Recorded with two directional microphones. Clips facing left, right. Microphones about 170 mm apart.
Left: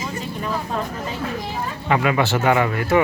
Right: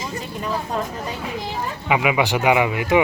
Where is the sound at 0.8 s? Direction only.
15° right (ahead or behind).